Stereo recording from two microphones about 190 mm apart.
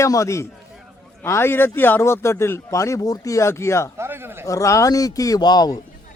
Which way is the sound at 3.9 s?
10° right (ahead or behind).